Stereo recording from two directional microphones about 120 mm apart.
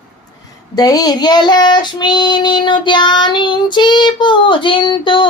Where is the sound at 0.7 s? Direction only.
30° left (ahead or behind).